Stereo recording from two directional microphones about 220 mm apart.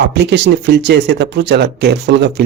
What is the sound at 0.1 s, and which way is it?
Speech, 50° right (ahead or behind).